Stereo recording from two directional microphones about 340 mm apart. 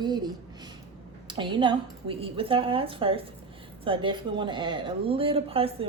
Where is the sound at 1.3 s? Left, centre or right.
Centre.